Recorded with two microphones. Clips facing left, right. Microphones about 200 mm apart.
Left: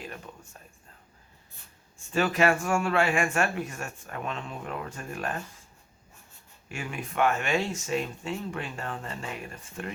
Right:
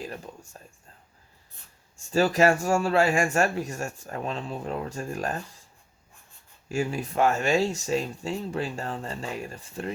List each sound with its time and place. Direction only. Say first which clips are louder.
2.0 s speech: right 3 dB; 35° right (ahead or behind)
6.7 s speech: right 8 dB; 35° right (ahead or behind)